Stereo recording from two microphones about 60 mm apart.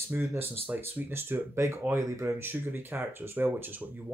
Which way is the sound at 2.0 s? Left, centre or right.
Right.